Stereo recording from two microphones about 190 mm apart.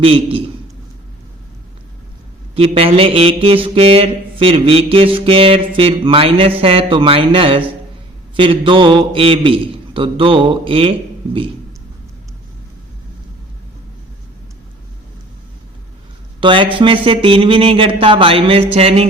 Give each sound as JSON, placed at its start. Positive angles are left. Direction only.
{"t": 0.0, "sound": "mantra", "side_deg": -30}
{"t": 2.6, "sound": "mantra", "side_deg": -30}
{"t": 16.4, "sound": "mantra", "side_deg": -25}